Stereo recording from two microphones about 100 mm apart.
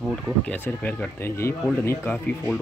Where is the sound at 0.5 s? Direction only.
15° left (ahead or behind).